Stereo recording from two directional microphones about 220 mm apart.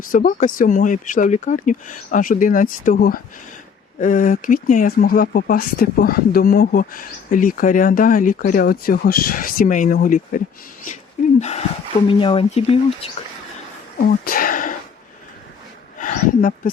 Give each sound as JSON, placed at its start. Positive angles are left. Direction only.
{"t": 0.0, "sound": "speech", "side_deg": 35}
{"t": 14.1, "sound": "speech", "side_deg": 40}
{"t": 16.0, "sound": "a sound", "side_deg": 35}